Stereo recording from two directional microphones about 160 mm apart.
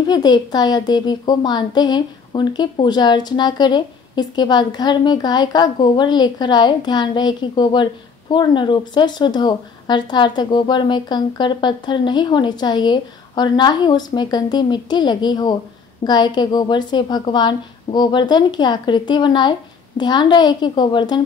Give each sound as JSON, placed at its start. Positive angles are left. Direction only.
{"t": 0.0, "sound": "a woman's voice", "side_deg": 25}